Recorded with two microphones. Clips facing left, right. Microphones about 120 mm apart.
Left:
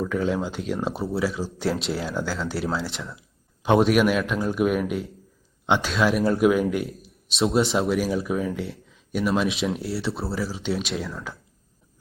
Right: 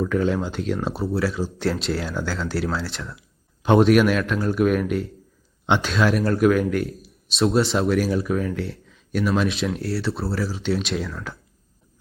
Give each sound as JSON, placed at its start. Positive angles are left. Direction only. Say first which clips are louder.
{"t": 0.0, "sound": "a man's voice", "louder": "right 3 dB", "side_deg": 5}